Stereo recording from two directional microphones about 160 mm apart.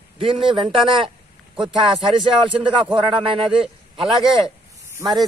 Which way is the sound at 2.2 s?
30° right (ahead or behind).